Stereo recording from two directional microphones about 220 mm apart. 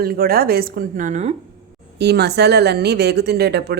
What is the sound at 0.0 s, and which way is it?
Speech, 45° right (ahead or behind).